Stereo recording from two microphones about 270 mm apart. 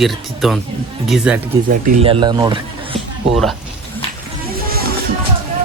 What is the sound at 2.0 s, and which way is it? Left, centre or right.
Speech, centre.